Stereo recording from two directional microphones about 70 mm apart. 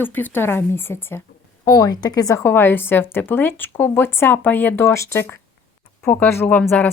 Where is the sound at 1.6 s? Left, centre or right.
Left.